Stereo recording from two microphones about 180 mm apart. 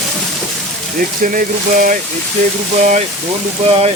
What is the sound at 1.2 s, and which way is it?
Speech, 50° right (ahead or behind).